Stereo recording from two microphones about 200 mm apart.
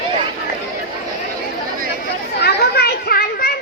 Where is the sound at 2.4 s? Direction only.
55° left (ahead or behind).